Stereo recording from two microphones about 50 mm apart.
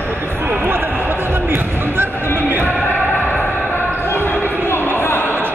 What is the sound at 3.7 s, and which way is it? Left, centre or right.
Basketball bounce, left.